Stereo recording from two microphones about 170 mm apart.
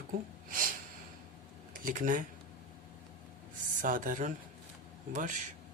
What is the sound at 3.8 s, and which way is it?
Speech, 50° right (ahead or behind).